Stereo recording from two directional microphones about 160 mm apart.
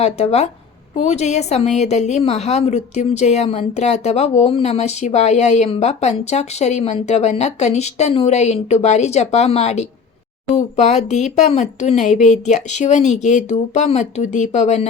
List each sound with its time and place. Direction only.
0.0 s a woman's voice: 40° left (ahead or behind)